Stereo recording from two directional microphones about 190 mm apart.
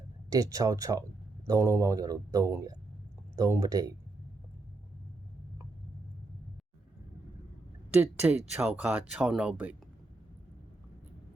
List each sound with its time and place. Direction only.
0.3 s speech: 20° right (ahead or behind)
7.9 s speech: 5° right (ahead or behind)